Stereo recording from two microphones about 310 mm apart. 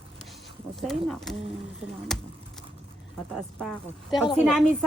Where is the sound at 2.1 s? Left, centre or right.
Centre.